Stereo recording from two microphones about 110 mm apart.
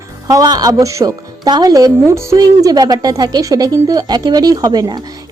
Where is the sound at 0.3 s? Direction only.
35° right (ahead or behind).